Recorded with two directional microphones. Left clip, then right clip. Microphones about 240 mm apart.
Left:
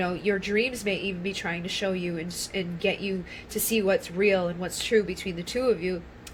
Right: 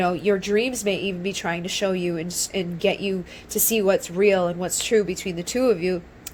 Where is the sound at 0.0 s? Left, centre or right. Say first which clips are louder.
Right 6 dB; right.